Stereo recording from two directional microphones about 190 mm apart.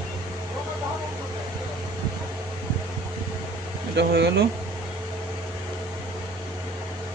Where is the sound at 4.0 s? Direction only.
65° right (ahead or behind).